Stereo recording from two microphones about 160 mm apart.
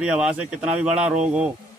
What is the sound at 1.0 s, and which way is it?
Speech, 45° right (ahead or behind).